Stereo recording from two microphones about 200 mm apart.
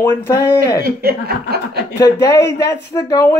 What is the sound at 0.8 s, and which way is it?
Speech, 50° right (ahead or behind).